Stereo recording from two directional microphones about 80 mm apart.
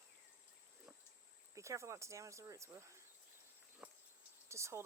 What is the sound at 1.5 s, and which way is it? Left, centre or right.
Speech, right.